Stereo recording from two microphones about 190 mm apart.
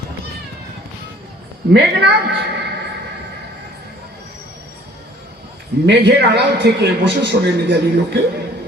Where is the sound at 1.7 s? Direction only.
60° right (ahead or behind).